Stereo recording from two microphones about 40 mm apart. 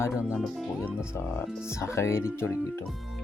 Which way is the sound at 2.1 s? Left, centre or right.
Left.